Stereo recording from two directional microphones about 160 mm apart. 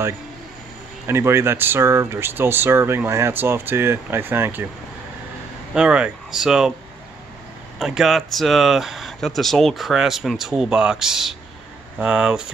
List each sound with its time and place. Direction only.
1.0 s speech: 15° right (ahead or behind)
5.8 s speech: 5° right (ahead or behind)
7.8 s speech: centre (ahead or behind)